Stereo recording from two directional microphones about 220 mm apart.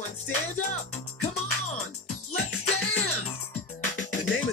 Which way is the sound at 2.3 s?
80° left.